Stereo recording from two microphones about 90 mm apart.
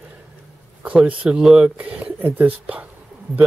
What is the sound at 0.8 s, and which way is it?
Speech, 15° right (ahead or behind).